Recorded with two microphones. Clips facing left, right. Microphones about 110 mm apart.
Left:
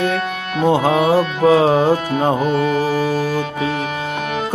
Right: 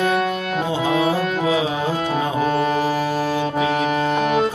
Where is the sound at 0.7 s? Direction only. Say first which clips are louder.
Left 7 dB; 60° left (ahead or behind).